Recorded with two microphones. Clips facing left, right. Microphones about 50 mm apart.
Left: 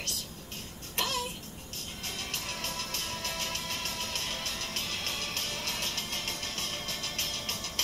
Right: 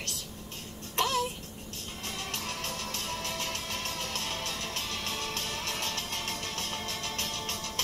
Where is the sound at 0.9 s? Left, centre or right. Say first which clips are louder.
Right 5 dB; right.